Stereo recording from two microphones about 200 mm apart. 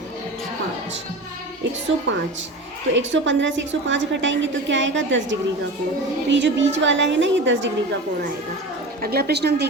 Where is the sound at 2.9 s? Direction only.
70° right (ahead or behind).